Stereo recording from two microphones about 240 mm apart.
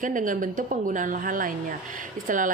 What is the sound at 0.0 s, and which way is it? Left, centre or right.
Speech, right.